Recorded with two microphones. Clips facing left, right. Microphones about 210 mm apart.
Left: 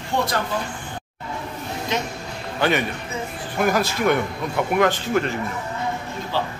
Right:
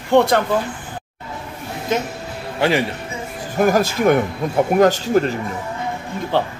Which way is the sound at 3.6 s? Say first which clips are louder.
Right 5 dB; 45° right (ahead or behind).